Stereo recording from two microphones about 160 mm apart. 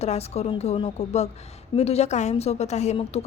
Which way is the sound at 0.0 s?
40° left (ahead or behind).